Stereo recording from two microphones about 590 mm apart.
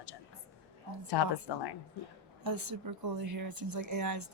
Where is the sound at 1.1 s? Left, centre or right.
Left.